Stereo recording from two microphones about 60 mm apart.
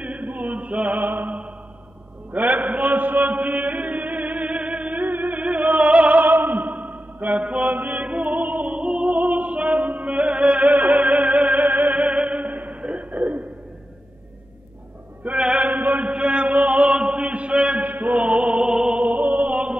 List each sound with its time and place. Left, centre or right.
0.0 s chant: centre
2.3 s chant: right
6.8 s mantra: right
8.0 s opera: right
9.1 s music: right
15.2 s mantra: centre
15.7 s chant: right
16.9 s a sound: centre
17.8 s music: right
19.1 s music: right